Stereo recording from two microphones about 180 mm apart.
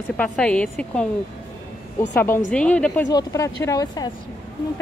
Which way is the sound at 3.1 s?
20° left (ahead or behind).